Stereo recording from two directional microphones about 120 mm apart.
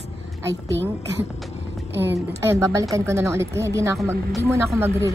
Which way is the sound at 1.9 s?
20° right (ahead or behind).